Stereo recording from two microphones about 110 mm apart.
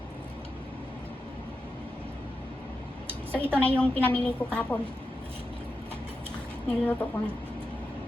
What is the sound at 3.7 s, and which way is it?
A woman's voice, 10° left (ahead or behind).